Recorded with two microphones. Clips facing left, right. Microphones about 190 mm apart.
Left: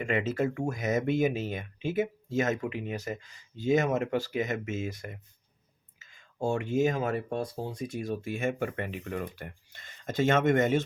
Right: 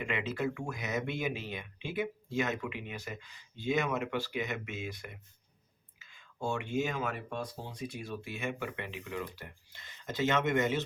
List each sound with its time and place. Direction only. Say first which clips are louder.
0.0 s speech: left 5 dB; 45° left (ahead or behind)